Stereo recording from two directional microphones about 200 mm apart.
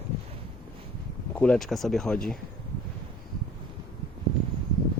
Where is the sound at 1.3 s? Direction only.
5° left (ahead or behind).